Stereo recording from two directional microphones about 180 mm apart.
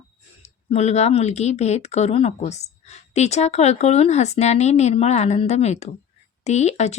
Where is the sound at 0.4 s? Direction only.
40° left (ahead or behind).